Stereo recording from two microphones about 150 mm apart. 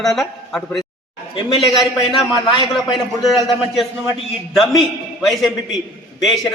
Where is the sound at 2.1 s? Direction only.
30° left (ahead or behind).